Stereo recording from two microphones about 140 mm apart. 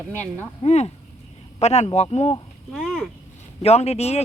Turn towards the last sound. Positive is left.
turn(degrees=50)  # may be behind; listen again after turning